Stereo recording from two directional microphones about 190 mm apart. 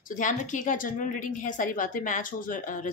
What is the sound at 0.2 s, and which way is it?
Speech, 40° left (ahead or behind).